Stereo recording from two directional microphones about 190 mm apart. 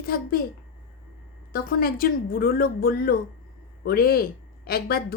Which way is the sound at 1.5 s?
50° left (ahead or behind).